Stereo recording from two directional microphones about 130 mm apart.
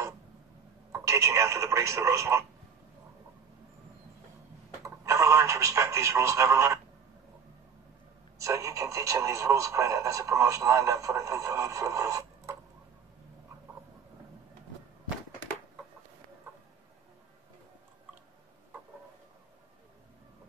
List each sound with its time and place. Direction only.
0.9 s speech: 25° right (ahead or behind)
4.8 s speech: 25° right (ahead or behind)
8.4 s speech: 25° right (ahead or behind)